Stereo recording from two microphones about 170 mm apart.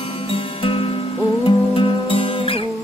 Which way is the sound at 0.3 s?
35° left (ahead or behind).